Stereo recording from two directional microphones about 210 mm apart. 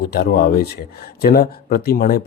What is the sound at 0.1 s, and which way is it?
Speech, 50° left (ahead or behind).